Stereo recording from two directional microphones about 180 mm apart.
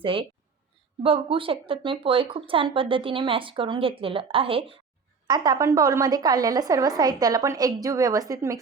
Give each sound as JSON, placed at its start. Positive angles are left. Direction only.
{"t": 0.0, "sound": "speech", "side_deg": -30}